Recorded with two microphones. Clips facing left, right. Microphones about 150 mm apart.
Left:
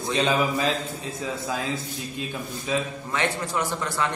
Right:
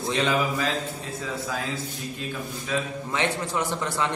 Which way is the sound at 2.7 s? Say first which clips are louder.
Left 2 dB; 20° left (ahead or behind).